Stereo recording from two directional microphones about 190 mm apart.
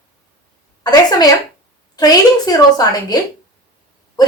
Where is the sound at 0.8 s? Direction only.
20° left (ahead or behind).